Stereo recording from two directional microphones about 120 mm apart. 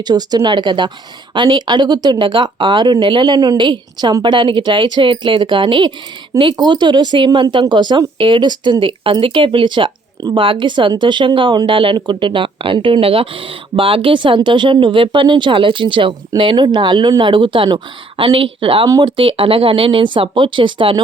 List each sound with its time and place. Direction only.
0.0 s speech: 35° right (ahead or behind)
18.9 s speech: 30° right (ahead or behind)
19.1 s speech: 50° right (ahead or behind)